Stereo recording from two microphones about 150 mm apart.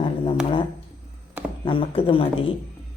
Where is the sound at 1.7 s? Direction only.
35° left (ahead or behind).